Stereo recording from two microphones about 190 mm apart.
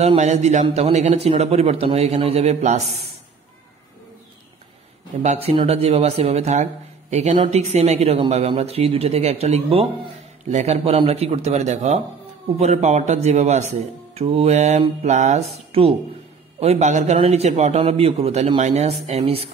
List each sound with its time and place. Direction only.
0.0 s speech: 35° right (ahead or behind)
5.2 s speech: 35° right (ahead or behind)